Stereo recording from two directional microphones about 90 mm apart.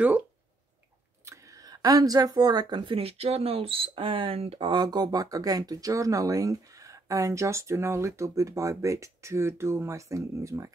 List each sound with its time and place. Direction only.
1.2 s a sound: 35° right (ahead or behind)
2.9 s speech: 90° right
4.7 s speech: 45° right (ahead or behind)